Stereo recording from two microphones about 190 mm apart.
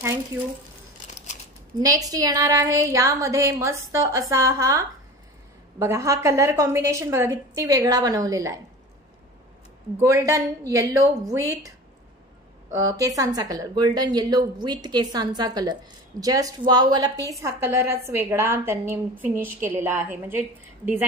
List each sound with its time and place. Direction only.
1.1 s scissors: 40° left (ahead or behind)
1.8 s a woman's voice: 20° right (ahead or behind)
5.8 s a woman's voice: 15° right (ahead or behind)
9.9 s a woman's voice: 15° right (ahead or behind)
12.7 s speech: 20° right (ahead or behind)